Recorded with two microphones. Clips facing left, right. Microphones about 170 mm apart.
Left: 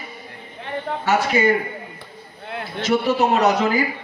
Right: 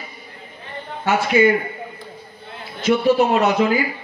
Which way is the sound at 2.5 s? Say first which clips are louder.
Left 7 dB; 70° left (ahead or behind).